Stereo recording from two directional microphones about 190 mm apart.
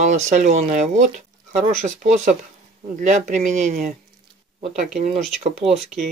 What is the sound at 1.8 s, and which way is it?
Speech, 40° right (ahead or behind).